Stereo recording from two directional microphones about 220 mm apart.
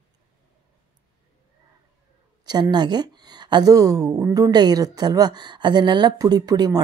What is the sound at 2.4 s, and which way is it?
Speech, 20° right (ahead or behind).